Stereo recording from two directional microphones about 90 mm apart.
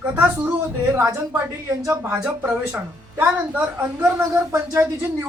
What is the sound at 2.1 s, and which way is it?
Speech, 10° right (ahead or behind).